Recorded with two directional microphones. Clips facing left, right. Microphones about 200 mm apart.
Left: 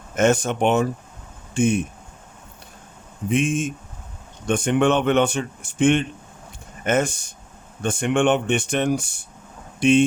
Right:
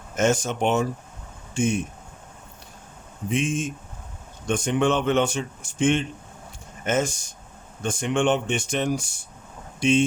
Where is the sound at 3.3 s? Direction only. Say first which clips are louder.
Left 4 dB; 55° left (ahead or behind).